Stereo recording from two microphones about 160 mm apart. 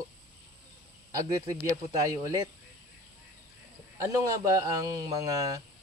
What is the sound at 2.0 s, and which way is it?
Speech, 20° right (ahead or behind).